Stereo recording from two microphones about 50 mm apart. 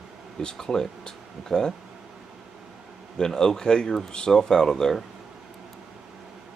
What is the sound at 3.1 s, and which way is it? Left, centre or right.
Speech, centre.